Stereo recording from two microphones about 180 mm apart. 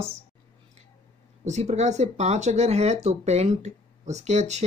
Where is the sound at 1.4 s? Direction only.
40° right (ahead or behind).